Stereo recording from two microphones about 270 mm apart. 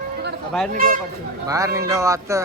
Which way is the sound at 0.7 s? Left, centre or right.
Right.